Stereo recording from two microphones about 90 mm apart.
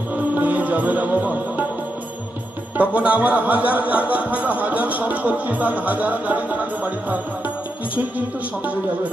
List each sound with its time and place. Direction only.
0.3 s music: 20° right (ahead or behind)
2.7 s speech: 15° right (ahead or behind)